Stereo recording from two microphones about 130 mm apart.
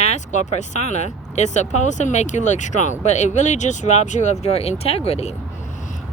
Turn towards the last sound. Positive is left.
turn(degrees=55)  # may be behind; listen again after turning